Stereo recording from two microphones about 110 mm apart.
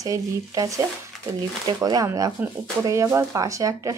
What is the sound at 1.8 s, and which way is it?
Speech, 35° right (ahead or behind).